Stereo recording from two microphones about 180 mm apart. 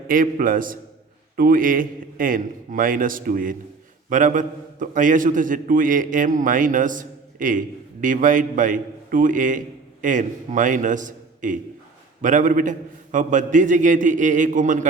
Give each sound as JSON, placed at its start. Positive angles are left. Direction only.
{"t": 0.1, "sound": "a man's voice", "side_deg": -50}